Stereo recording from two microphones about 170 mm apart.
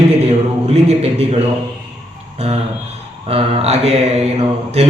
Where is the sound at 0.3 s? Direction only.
40° right (ahead or behind).